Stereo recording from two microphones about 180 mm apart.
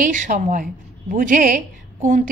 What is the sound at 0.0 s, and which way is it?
A woman's voice, 45° right (ahead or behind).